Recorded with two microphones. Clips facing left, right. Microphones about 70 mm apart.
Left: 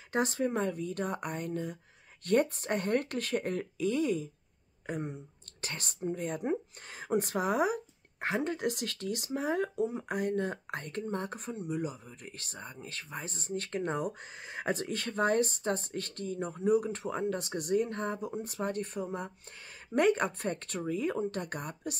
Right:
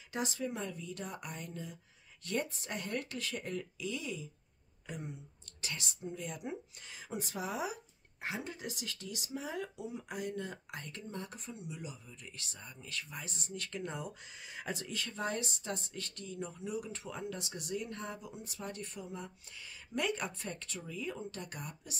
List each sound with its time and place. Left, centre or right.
0.1 s speech: left